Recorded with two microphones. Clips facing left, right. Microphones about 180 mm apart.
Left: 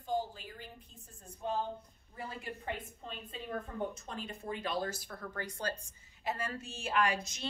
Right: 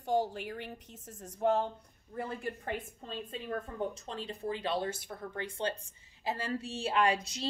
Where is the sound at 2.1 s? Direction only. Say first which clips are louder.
Right 6 dB; 55° right (ahead or behind).